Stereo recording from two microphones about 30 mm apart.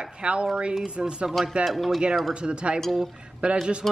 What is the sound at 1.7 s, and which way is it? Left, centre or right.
Speech, centre.